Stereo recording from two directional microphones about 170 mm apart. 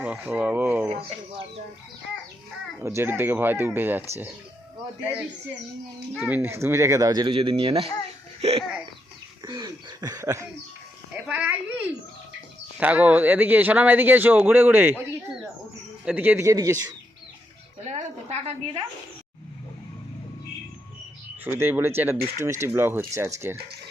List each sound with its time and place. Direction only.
0.0 s speech: 10° right (ahead or behind)
2.7 s speech: 15° right (ahead or behind)
6.2 s speech: 10° right (ahead or behind); by 7.9 s 35° right (ahead or behind)
8.4 s laughter: 40° right (ahead or behind)
9.4 s speech: 25° right (ahead or behind)
16.0 s speech: 10° right (ahead or behind)
17.8 s a woman's voice: 40° right (ahead or behind)
21.4 s speech: 10° right (ahead or behind)